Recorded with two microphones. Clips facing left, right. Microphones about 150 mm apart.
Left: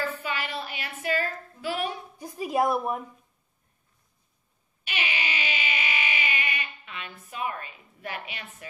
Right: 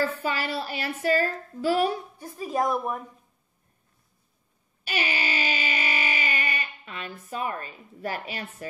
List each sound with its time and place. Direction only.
0.0 s a woman's voice: 40° right (ahead or behind)
2.1 s a woman's voice: 10° left (ahead or behind)
4.8 s music: 40° right (ahead or behind)
7.2 s a woman's voice: 40° right (ahead or behind)